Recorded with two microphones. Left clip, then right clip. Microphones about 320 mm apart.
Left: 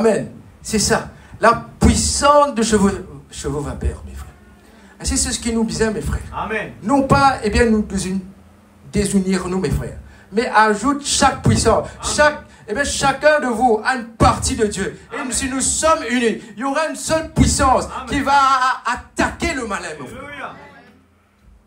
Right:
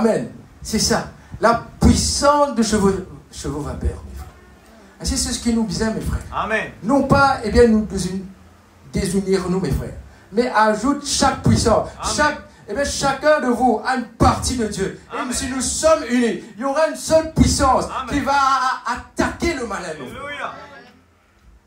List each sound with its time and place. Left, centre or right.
0.7 s speech: left
4.9 s speech: left